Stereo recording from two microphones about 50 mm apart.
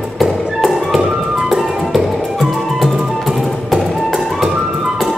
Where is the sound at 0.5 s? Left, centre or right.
Centre.